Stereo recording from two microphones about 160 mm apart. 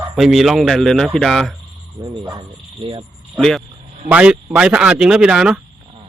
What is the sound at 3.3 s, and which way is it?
Speech, centre (ahead or behind).